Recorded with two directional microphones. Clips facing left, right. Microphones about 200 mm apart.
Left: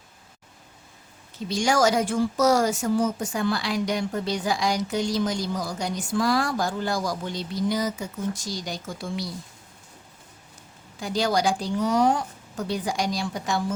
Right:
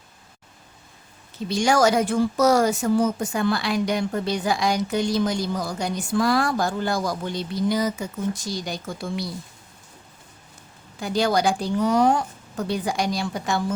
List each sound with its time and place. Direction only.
1.5 s speech: 60° right (ahead or behind)
11.0 s speech: 55° right (ahead or behind)